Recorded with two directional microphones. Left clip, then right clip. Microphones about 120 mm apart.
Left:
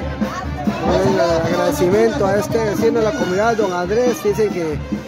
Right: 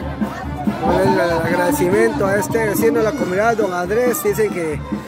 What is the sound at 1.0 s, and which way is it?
Speech, 15° left (ahead or behind).